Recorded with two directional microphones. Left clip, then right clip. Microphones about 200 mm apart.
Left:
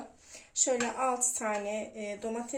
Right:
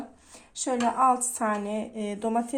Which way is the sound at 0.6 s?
35° right (ahead or behind).